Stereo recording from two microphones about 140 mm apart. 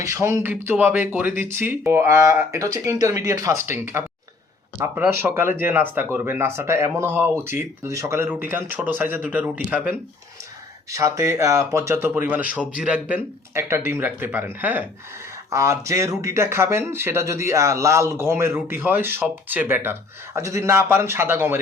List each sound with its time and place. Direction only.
0.0 s speech: 20° right (ahead or behind)
10.9 s speech: 20° right (ahead or behind)